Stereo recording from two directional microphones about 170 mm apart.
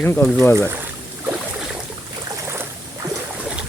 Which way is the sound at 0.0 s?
10° left (ahead or behind).